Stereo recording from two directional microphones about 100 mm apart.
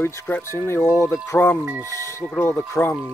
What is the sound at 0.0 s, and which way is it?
Speech, 25° left (ahead or behind).